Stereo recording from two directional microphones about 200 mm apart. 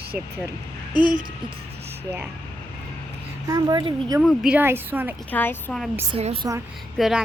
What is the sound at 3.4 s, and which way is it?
Speech, 20° right (ahead or behind).